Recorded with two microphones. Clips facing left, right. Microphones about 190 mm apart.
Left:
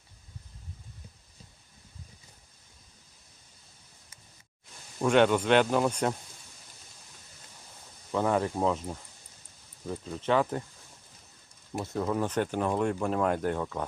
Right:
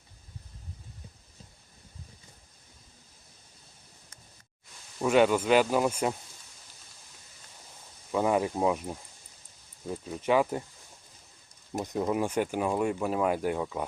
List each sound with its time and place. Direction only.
4.9 s speech: 5° right (ahead or behind)
8.1 s speech: 10° right (ahead or behind)
11.8 s speech: 15° right (ahead or behind)